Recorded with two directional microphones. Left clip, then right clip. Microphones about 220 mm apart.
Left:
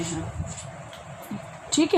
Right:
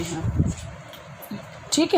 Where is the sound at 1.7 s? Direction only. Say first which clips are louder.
Right 1 dB; 40° right (ahead or behind).